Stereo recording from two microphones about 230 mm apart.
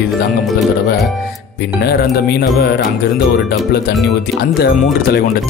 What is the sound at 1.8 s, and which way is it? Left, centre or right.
Speech, left.